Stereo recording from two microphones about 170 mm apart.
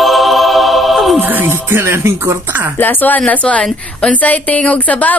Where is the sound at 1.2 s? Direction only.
10° right (ahead or behind).